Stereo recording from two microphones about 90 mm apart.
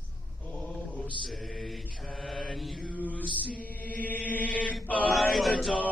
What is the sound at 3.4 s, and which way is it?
Chant, 20° left (ahead or behind).